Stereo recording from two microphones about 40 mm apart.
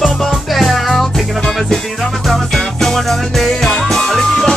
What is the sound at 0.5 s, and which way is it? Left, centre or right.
Music, centre.